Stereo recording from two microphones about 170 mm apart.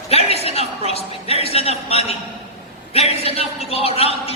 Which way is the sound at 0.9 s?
35° left (ahead or behind).